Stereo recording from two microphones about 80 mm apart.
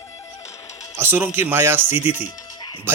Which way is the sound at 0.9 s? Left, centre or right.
Right.